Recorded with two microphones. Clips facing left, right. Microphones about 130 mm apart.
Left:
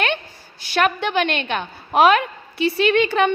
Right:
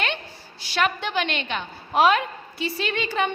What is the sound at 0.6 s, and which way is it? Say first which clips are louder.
A woman's voice: left 5 dB; 55° left (ahead or behind).